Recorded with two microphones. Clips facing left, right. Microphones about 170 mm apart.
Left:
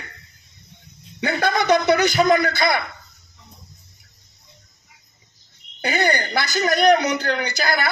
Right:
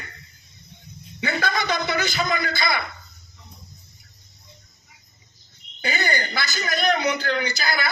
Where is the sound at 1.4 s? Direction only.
60° left (ahead or behind).